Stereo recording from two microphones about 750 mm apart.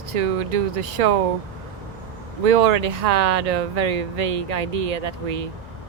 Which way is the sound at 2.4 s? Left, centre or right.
Right.